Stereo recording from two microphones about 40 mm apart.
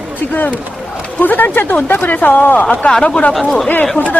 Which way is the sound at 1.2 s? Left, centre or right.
Left.